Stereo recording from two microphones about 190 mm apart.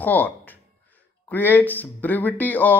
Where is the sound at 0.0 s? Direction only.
10° left (ahead or behind).